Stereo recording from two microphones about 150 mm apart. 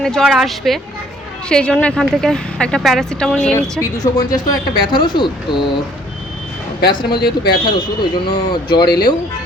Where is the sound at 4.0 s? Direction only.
25° left (ahead or behind).